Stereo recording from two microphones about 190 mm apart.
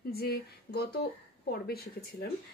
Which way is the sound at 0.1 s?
55° left (ahead or behind).